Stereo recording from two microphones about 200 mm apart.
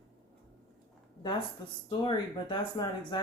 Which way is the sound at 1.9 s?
25° left (ahead or behind).